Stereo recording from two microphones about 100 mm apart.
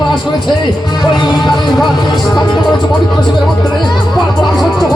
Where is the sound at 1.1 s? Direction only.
45° left (ahead or behind).